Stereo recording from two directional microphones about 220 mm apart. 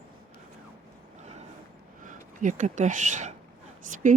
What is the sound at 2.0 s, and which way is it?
Speech, 35° right (ahead or behind).